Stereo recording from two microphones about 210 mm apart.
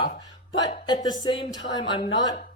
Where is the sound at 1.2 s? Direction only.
20° left (ahead or behind).